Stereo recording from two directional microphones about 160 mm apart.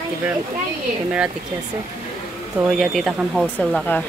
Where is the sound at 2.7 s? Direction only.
Centre (ahead or behind).